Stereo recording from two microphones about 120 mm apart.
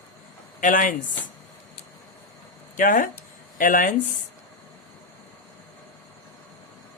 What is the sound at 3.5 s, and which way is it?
Speech, 90° left.